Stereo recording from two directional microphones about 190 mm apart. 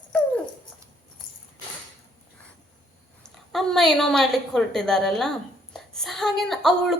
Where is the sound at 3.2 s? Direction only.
Centre (ahead or behind).